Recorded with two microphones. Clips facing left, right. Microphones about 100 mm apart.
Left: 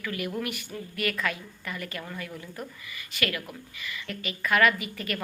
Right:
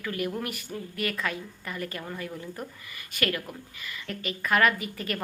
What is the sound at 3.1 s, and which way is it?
A woman's voice, 45° right (ahead or behind).